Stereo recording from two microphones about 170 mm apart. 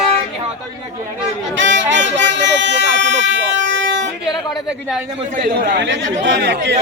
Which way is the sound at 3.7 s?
90° right.